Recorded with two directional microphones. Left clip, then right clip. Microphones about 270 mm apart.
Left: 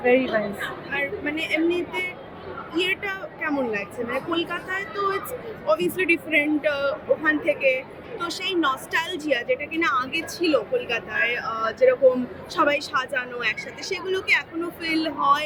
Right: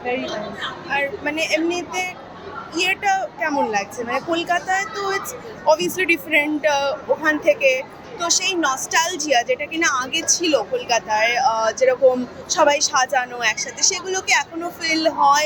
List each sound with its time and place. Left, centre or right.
0.0 s a woman's voice: left
0.9 s a man's voice: centre